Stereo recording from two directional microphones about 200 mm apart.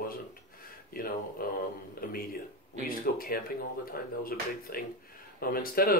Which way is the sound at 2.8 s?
45° left (ahead or behind).